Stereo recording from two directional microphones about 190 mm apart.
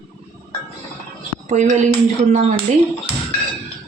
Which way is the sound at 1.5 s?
40° right (ahead or behind).